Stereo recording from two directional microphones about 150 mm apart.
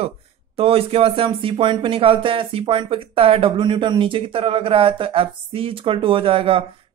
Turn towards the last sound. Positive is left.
turn(degrees=-40)  # may be behind; listen again after turning